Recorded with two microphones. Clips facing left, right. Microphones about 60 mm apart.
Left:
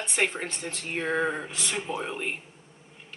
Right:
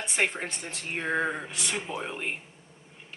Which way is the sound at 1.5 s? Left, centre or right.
Right.